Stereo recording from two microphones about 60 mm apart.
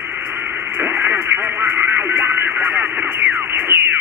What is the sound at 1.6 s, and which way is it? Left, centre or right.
Speech, right.